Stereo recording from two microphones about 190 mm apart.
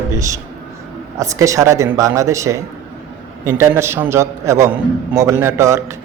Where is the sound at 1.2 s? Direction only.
15° right (ahead or behind).